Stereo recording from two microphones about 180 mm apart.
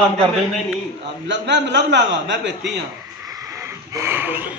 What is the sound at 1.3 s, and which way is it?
A man's voice, 75° right (ahead or behind).